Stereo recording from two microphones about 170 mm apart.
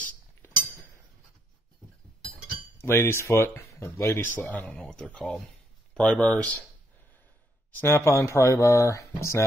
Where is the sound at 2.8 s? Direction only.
15° left (ahead or behind).